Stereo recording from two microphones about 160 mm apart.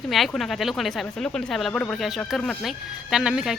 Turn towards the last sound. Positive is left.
turn(degrees=-5)  # may be behind; listen again after turning